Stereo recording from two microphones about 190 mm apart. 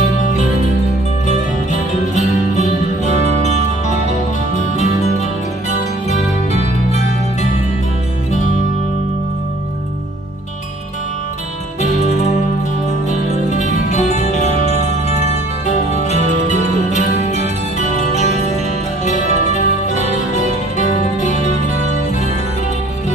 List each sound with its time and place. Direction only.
1.2 s music: 40° left (ahead or behind)
4.6 s music: 35° left (ahead or behind)
11.8 s music: 40° left (ahead or behind)